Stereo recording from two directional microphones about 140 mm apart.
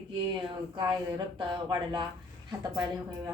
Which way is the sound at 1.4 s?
35° right (ahead or behind).